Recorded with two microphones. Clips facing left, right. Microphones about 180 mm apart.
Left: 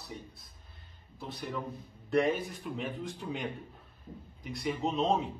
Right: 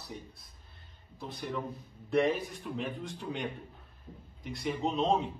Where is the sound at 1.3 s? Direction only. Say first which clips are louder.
Right 1 dB; centre (ahead or behind).